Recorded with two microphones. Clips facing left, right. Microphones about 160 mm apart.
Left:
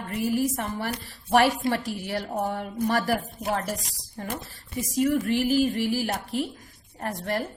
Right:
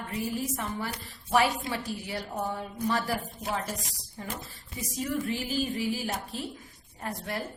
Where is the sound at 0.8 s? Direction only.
65° left (ahead or behind).